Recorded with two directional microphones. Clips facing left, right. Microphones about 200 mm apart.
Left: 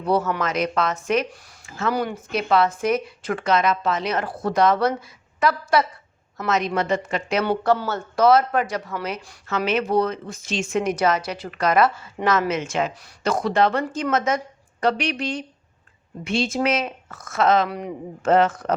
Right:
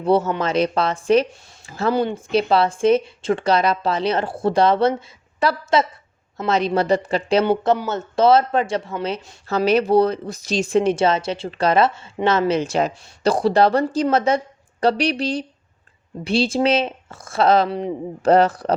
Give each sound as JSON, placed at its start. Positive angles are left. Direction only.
{"t": 0.0, "sound": "speech", "side_deg": -25}